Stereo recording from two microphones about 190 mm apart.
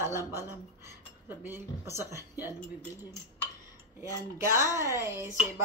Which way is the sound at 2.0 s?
15° right (ahead or behind).